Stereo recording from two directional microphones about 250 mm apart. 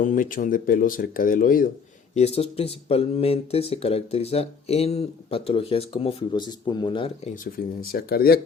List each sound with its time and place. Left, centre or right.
0.0 s speech: left
7.4 s speech: left